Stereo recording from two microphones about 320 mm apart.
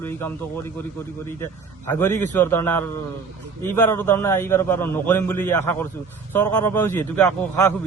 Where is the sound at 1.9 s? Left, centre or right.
Centre.